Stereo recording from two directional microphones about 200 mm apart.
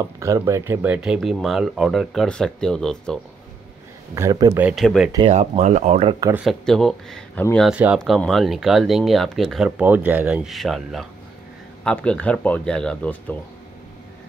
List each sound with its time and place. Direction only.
0.0 s speech: 15° right (ahead or behind); by 3.2 s 5° left (ahead or behind)
4.1 s speech: 15° right (ahead or behind)
4.6 s speech: centre (ahead or behind)
5.1 s speech: 30° right (ahead or behind)
6.3 s speech: centre (ahead or behind)